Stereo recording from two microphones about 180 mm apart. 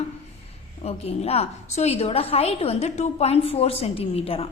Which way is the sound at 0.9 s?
35° left (ahead or behind).